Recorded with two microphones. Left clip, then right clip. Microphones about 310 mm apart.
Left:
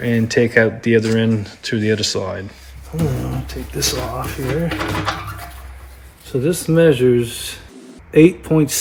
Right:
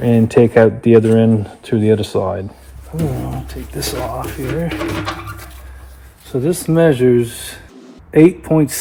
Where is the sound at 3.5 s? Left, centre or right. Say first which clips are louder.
Left 7 dB; centre.